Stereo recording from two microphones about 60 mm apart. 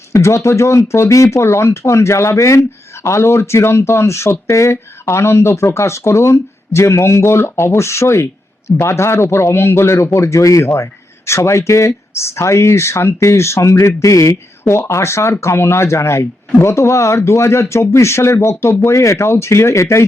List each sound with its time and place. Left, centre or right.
0.1 s speech: left